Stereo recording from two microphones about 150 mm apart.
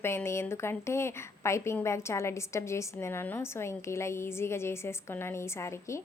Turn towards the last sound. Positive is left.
turn(degrees=20)  # may be behind; listen again after turning